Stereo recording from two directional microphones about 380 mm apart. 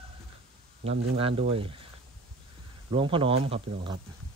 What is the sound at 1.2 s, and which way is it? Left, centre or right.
Speech, centre.